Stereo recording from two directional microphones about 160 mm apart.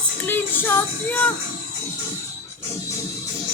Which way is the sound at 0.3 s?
15° left (ahead or behind).